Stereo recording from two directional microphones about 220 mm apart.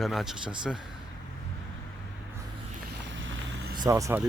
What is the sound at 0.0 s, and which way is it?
Speech, centre (ahead or behind).